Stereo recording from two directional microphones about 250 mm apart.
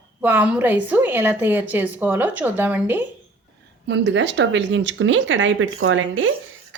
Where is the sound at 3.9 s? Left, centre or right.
Right.